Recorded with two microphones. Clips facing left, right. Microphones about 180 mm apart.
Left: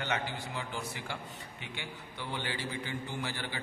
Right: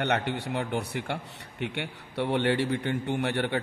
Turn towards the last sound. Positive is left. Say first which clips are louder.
# right 11 dB
turn(degrees=-65)  # may be behind; listen again after turning